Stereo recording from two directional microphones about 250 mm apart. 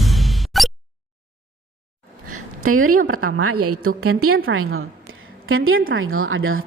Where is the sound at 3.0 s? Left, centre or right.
Right.